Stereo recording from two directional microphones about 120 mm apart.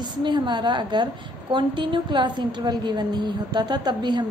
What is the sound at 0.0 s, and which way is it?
A woman's voice, 40° right (ahead or behind).